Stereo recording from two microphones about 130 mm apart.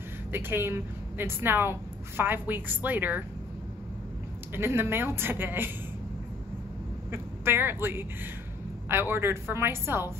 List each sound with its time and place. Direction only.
0.3 s a woman's voice: 15° right (ahead or behind)
4.6 s a woman's voice: 20° right (ahead or behind)
7.1 s a woman's voice: 20° right (ahead or behind)